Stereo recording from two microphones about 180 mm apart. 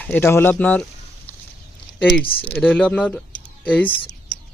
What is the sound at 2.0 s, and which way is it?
Speech, 5° left (ahead or behind).